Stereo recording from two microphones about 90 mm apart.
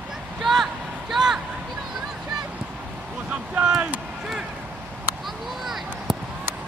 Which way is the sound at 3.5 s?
10° right (ahead or behind).